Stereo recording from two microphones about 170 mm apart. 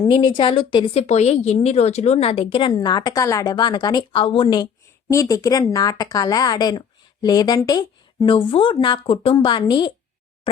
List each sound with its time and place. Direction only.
0.0 s a woman's voice: 25° left (ahead or behind)
1.0 s a woman's voice: 40° left (ahead or behind)
10.5 s a sound: 35° left (ahead or behind)